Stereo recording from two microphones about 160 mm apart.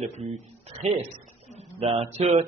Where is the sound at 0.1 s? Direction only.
40° right (ahead or behind).